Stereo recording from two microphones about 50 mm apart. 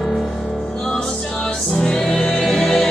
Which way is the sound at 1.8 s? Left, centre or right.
Centre.